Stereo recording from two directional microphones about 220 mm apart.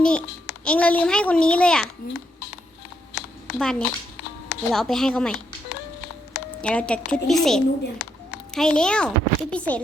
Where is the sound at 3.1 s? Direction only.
50° left (ahead or behind).